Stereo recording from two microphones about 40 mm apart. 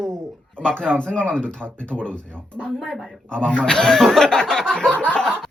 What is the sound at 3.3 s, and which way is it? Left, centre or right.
Speech, left.